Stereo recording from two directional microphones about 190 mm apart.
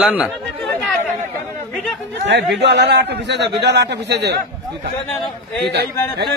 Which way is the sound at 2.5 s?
65° right (ahead or behind).